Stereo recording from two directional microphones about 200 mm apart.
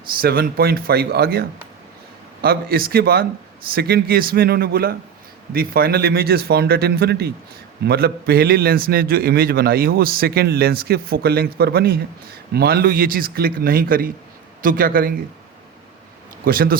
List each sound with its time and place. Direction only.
0.2 s a man's voice: 50° right (ahead or behind)
16.4 s a man's voice: 45° right (ahead or behind)